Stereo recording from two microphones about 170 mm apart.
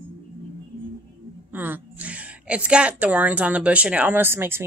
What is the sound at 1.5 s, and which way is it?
A woman's voice, 10° right (ahead or behind).